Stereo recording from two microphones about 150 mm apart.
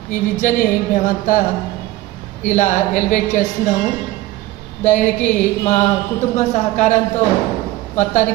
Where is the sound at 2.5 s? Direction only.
55° left (ahead or behind).